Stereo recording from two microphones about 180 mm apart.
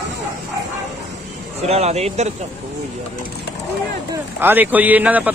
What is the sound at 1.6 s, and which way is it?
Speech, 35° right (ahead or behind).